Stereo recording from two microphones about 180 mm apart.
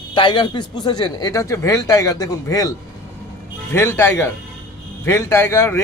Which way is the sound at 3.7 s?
10° left (ahead or behind).